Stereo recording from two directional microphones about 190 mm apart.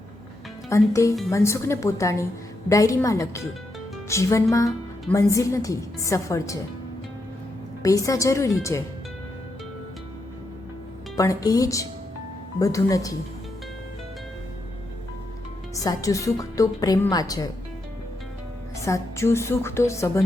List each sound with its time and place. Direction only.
0.7 s a woman's voice: 15° left (ahead or behind)
7.8 s a woman's voice: 15° left (ahead or behind)
11.2 s a woman's voice: 20° left (ahead or behind)
15.7 s a woman's voice: 20° left (ahead or behind)
18.8 s a woman's voice: 15° left (ahead or behind)